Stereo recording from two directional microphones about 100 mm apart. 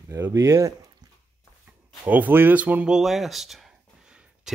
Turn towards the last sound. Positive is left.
turn(degrees=-5)  # may be behind; listen again after turning